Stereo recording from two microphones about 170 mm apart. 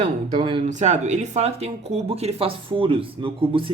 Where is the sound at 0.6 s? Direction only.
45° right (ahead or behind).